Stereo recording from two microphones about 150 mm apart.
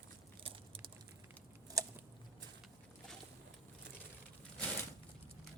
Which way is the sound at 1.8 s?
20° right (ahead or behind).